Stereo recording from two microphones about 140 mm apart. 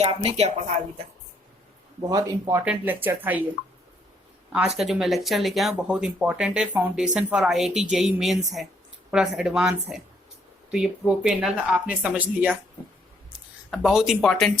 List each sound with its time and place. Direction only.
0.0 s speech: 45° right (ahead or behind)
2.0 s speech: 25° right (ahead or behind)
2.6 s speech: 10° right (ahead or behind)
4.8 s speech: centre (ahead or behind)